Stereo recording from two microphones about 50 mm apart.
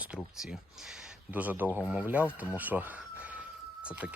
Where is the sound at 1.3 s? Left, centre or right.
Right.